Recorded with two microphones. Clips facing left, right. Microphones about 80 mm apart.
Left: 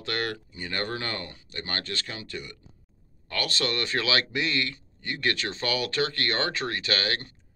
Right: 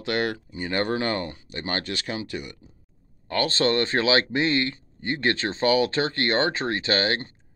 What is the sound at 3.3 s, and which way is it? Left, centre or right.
Speech, right.